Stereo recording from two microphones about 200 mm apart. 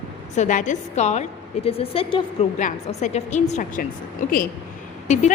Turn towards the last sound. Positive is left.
turn(degrees=35)  # may be behind; listen again after turning